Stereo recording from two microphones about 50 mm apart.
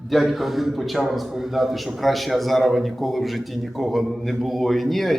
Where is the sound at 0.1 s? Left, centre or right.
Centre.